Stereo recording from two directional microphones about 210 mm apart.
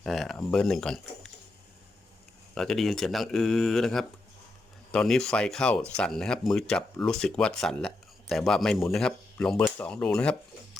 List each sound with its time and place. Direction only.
0.0 s speech: centre (ahead or behind)
2.6 s speech: centre (ahead or behind)